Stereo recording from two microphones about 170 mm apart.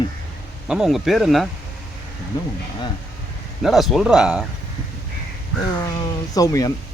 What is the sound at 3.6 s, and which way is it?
Speech, centre (ahead or behind).